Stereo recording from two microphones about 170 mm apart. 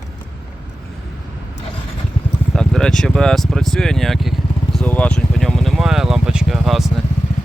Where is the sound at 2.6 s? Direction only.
5° left (ahead or behind).